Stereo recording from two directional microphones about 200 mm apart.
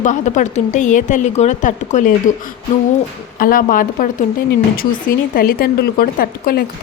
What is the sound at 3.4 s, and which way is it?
Speech, 45° left (ahead or behind).